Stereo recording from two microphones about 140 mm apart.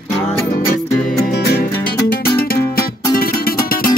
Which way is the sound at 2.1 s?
90° left.